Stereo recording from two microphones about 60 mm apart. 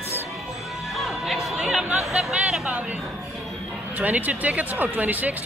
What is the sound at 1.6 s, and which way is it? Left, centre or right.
Speech, centre.